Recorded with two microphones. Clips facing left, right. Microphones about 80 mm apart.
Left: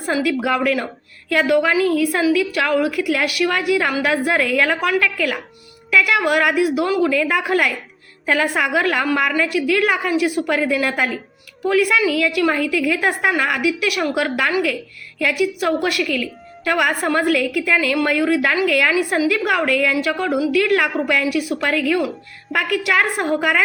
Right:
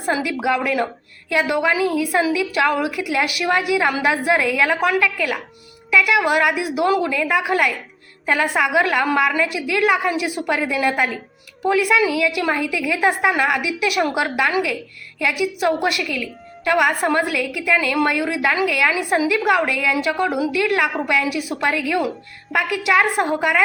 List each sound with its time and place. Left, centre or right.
0.0 s a woman's voice: centre
14.3 s a woman's voice: centre
21.3 s a woman's voice: centre
21.7 s a woman's voice: centre